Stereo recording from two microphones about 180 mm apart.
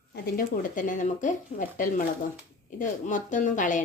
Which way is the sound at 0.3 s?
45° left (ahead or behind).